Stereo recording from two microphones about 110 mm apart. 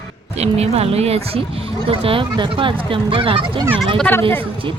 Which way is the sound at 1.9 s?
55° right (ahead or behind).